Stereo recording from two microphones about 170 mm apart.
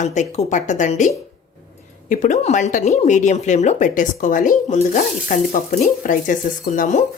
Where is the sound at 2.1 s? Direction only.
45° left (ahead or behind).